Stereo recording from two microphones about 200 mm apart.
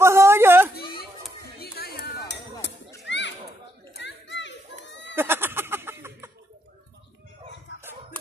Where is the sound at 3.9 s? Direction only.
60° left (ahead or behind).